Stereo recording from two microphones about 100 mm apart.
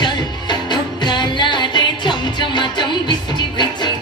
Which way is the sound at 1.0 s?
50° left (ahead or behind).